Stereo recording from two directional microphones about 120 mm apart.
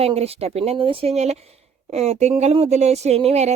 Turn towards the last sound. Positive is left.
turn(degrees=-65)  # may be behind; listen again after turning